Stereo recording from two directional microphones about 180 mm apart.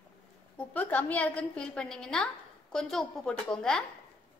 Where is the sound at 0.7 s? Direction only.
10° left (ahead or behind).